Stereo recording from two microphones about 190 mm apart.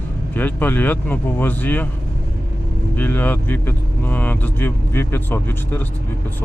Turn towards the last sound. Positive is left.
turn(degrees=10)  # may be behind; listen again after turning